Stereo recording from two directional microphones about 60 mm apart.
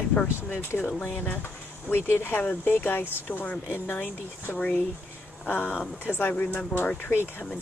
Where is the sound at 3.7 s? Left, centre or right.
Left.